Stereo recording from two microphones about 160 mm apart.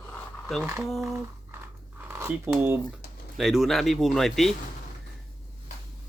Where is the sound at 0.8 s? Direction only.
Centre (ahead or behind).